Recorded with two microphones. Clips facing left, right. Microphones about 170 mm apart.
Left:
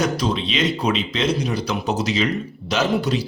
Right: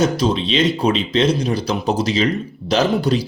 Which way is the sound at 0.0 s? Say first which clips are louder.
Right 4 dB; 30° right (ahead or behind).